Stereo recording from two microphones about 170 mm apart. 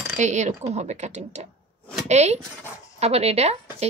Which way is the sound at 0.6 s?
40° right (ahead or behind).